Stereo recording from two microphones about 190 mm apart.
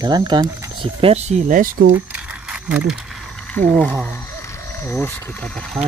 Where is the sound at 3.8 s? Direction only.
10° left (ahead or behind).